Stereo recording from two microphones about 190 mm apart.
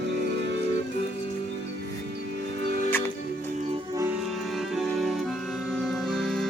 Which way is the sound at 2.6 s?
60° right (ahead or behind).